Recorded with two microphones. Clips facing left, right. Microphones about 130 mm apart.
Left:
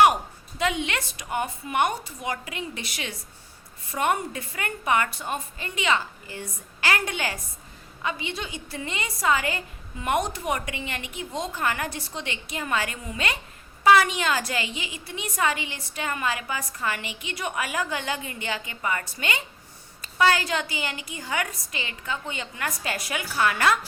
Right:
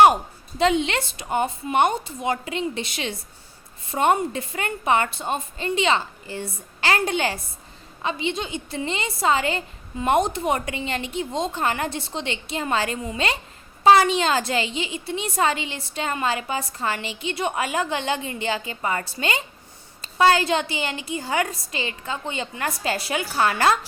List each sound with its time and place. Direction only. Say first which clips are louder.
0.6 s a woman's voice: right 6 dB; 30° right (ahead or behind)